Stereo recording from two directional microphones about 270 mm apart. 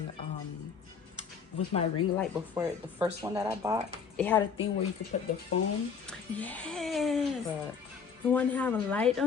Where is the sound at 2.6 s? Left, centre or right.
Centre.